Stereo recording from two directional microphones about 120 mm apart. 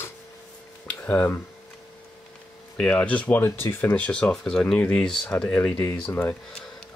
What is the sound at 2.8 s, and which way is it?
Speech, 10° left (ahead or behind).